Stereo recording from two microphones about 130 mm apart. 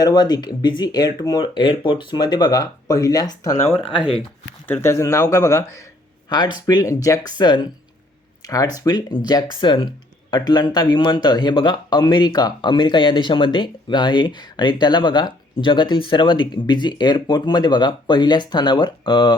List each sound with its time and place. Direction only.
0.0 s speech: 30° left (ahead or behind)
3.8 s speech: 45° left (ahead or behind)
4.7 s speech: 20° left (ahead or behind)
6.2 s speech: 35° left (ahead or behind)